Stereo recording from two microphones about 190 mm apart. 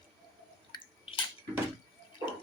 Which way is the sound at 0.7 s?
30° left (ahead or behind).